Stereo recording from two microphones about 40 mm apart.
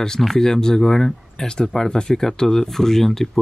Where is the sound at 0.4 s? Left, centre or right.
Centre.